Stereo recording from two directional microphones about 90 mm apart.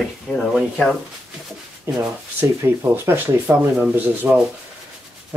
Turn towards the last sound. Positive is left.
turn(degrees=-20)  # may be behind; listen again after turning